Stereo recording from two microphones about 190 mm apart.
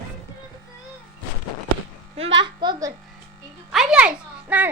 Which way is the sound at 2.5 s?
20° right (ahead or behind).